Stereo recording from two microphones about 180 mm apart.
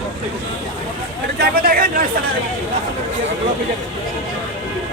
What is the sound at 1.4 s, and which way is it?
Speech, 55° right (ahead or behind).